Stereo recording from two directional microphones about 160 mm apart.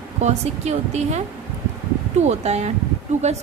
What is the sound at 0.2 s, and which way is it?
A woman's voice, 45° right (ahead or behind).